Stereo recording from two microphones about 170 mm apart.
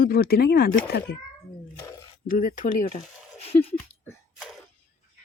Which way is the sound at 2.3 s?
55° left (ahead or behind).